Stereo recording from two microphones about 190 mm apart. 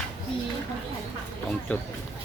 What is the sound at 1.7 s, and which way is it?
Speech, 10° left (ahead or behind).